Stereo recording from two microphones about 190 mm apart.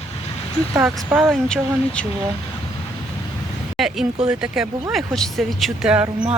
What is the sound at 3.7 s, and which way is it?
Speech, centre (ahead or behind).